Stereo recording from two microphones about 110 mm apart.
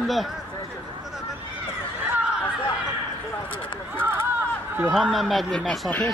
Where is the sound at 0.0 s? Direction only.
Centre (ahead or behind).